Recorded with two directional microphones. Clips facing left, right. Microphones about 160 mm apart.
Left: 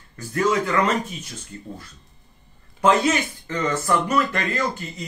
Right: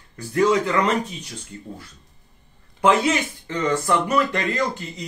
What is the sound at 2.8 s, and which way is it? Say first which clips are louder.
Speech: even; 15° right (ahead or behind).